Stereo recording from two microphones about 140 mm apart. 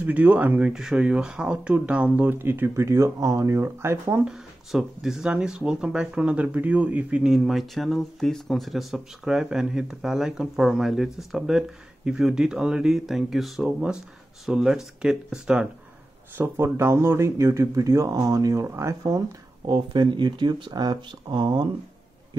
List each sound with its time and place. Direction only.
0.0 s speech: 10° right (ahead or behind)
4.2 s speech: 5° right (ahead or behind); by 21.6 s 30° right (ahead or behind)